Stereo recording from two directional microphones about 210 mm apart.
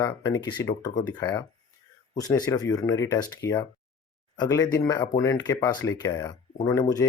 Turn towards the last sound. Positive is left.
turn(degrees=15)  # may be behind; listen again after turning